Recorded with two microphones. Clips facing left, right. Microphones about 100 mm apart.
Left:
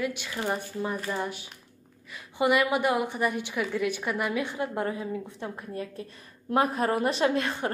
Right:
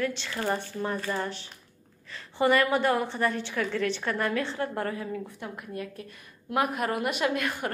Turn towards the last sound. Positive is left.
turn(degrees=30)  # may be behind; listen again after turning